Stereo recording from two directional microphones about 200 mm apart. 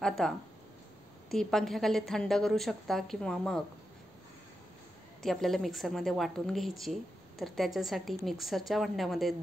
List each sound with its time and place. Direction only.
0.0 s a woman's voice: centre (ahead or behind)
1.3 s a woman's voice: centre (ahead or behind)
5.2 s a woman's voice: centre (ahead or behind)